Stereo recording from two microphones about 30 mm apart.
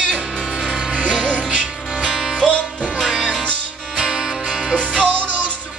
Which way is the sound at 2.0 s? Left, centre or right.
Centre.